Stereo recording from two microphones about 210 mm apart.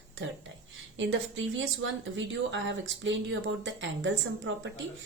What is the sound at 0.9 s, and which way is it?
A woman's voice, 65° right (ahead or behind).